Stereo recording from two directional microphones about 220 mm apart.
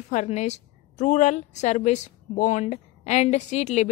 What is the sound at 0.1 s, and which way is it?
A woman's voice, 30° left (ahead or behind).